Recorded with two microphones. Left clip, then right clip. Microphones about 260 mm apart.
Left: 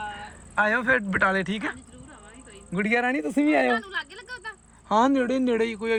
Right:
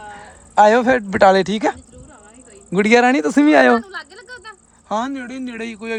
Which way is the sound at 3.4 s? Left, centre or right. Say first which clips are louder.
Right 10 dB; right.